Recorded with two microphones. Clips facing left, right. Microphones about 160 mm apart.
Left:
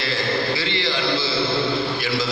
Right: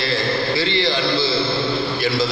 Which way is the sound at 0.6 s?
30° right (ahead or behind).